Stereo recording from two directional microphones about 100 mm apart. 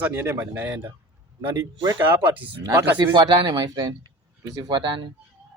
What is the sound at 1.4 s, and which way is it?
Speech, 45° right (ahead or behind).